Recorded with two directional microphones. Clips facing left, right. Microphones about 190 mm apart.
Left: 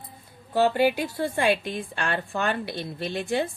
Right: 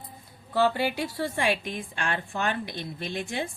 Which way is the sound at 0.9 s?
55° left (ahead or behind).